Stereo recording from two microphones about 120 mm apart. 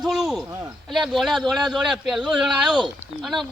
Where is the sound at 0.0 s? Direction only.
5° right (ahead or behind).